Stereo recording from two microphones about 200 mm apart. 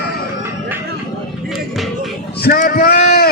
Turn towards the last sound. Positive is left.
turn(degrees=50)  # may be behind; listen again after turning